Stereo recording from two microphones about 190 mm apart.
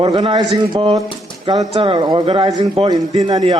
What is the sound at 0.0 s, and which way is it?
A man's voice, 25° right (ahead or behind).